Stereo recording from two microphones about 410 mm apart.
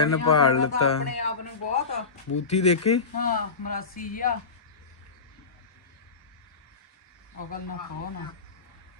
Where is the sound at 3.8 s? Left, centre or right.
Centre.